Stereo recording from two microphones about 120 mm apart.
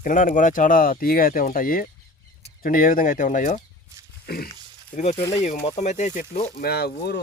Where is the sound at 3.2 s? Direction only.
90° left.